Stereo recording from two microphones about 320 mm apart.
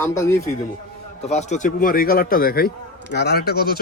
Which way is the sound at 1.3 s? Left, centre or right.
Left.